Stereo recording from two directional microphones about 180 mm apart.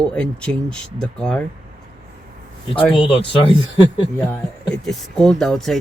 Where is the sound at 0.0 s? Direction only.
5° left (ahead or behind).